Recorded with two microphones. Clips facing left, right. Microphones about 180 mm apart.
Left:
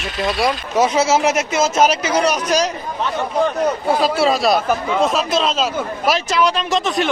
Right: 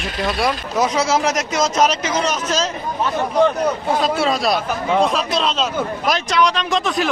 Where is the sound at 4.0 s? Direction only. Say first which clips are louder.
Left 2 dB; 5° left (ahead or behind).